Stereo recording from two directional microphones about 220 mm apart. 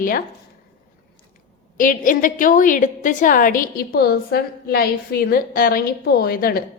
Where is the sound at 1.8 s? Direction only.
35° left (ahead or behind).